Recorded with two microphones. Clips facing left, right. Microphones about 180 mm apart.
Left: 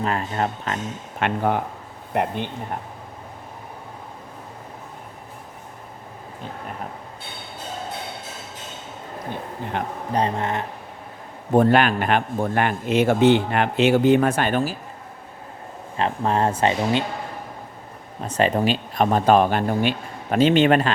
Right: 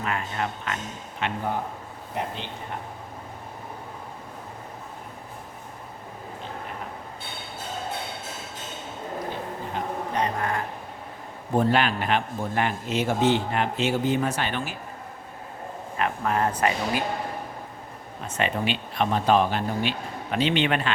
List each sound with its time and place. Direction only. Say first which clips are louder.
0.0 s speech: left 5 dB; 35° left (ahead or behind)
1.2 s speech: left 6 dB; 75° left (ahead or behind)
2.1 s speech: left 8 dB; 55° left (ahead or behind)
9.7 s speech: left 4 dB; 70° left (ahead or behind)
10.1 s speech: left 5 dB; 30° left (ahead or behind)
11.5 s a man's voice: left 6 dB; 55° left (ahead or behind); by 14.8 s 40° left (ahead or behind)
16.0 s speech: left 4 dB; 30° left (ahead or behind)
18.3 s speech: left 7 dB; 35° left (ahead or behind)